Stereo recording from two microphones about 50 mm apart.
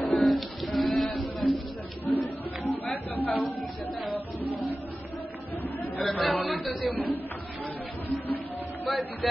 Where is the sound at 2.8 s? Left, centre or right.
Left.